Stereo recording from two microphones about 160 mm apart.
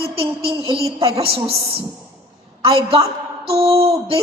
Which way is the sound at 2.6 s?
35° right (ahead or behind).